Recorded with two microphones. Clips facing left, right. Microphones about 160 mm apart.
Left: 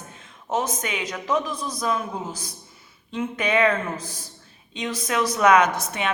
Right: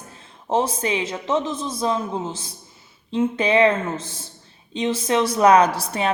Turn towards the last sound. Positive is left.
turn(degrees=-35)  # may be behind; listen again after turning